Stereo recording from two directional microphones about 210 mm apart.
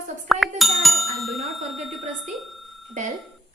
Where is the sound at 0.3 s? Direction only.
Centre (ahead or behind).